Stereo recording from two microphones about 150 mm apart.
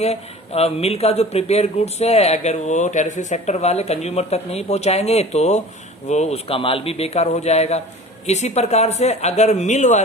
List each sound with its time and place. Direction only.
0.0 s speech: 45° left (ahead or behind)